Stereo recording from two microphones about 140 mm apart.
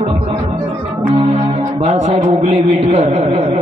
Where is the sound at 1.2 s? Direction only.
50° right (ahead or behind).